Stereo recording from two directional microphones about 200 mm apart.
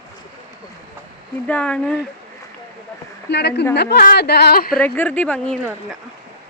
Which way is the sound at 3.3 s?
55° left (ahead or behind).